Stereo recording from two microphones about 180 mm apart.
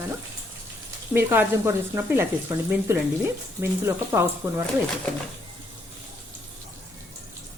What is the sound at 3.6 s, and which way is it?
Speech, 15° right (ahead or behind).